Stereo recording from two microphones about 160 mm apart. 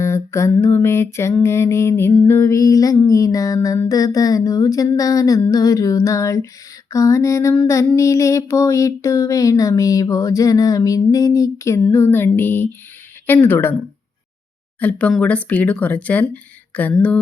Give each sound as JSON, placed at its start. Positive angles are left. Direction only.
{"t": 0.0, "sound": "mantra", "side_deg": 15}
{"t": 13.2, "sound": "speech", "side_deg": 10}
{"t": 14.8, "sound": "speech", "side_deg": 10}